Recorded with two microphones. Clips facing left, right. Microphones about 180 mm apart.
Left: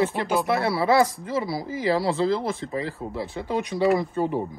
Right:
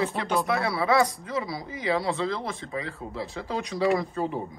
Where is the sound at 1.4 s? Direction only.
30° left (ahead or behind).